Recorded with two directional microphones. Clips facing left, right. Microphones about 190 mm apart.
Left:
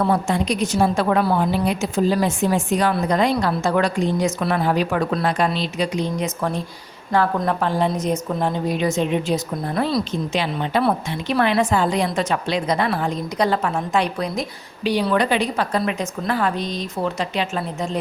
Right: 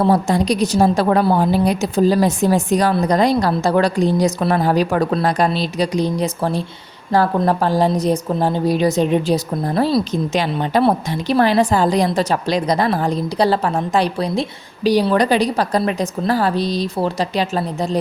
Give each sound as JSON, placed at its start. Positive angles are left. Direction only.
{"t": 0.0, "sound": "a woman's voice", "side_deg": -35}